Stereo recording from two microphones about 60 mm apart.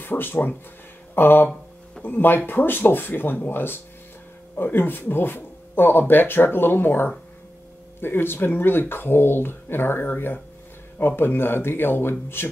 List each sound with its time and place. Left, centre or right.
0.0 s speech: left